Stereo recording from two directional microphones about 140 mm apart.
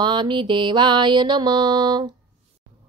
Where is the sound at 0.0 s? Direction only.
35° right (ahead or behind).